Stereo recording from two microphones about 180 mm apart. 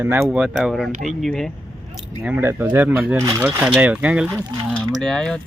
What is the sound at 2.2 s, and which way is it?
Speech, 10° right (ahead or behind).